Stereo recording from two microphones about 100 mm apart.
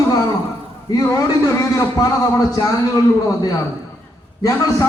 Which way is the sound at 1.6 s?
35° left (ahead or behind).